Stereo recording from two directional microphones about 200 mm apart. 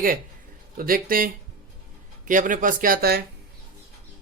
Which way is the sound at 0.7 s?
45° right (ahead or behind).